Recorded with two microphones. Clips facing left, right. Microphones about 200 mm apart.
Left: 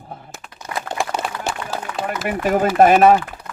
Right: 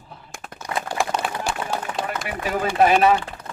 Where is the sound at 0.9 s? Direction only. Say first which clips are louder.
Even; centre (ahead or behind).